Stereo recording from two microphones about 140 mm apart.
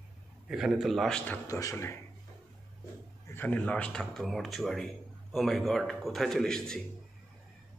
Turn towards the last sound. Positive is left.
turn(degrees=5)  # may be behind; listen again after turning